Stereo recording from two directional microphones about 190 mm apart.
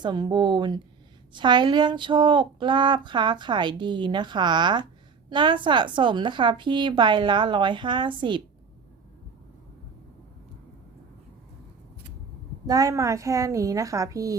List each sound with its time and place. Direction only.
0.0 s speech: 25° right (ahead or behind)
12.6 s a woman's voice: 20° right (ahead or behind)